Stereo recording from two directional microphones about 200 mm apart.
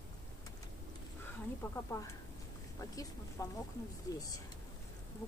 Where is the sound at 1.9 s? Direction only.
20° left (ahead or behind).